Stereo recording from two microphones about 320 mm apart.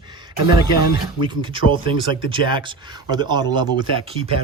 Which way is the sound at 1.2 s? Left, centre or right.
Centre.